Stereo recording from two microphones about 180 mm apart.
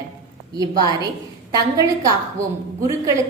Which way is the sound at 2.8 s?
15° right (ahead or behind).